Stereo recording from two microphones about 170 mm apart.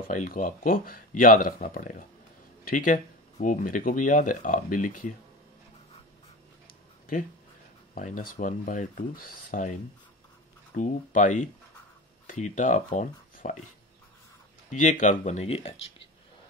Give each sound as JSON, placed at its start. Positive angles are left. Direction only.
{"t": 0.1, "sound": "speech", "side_deg": 50}
{"t": 7.9, "sound": "speech", "side_deg": 55}
{"t": 14.7, "sound": "speech", "side_deg": 45}